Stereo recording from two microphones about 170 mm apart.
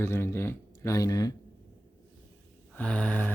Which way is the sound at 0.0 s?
15° left (ahead or behind).